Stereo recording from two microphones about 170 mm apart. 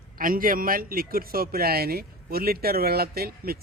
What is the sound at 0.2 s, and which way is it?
A man's voice, 55° right (ahead or behind).